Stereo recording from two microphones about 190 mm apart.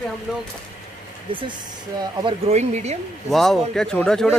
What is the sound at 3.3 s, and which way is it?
A man's voice, centre (ahead or behind).